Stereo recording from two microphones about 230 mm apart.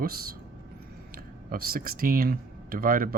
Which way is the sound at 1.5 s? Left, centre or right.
Right.